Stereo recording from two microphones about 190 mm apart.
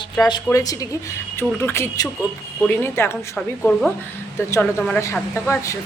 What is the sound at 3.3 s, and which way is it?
Speech, centre (ahead or behind).